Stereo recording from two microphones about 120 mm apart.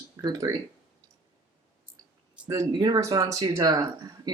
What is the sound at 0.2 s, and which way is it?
Speech, 30° right (ahead or behind).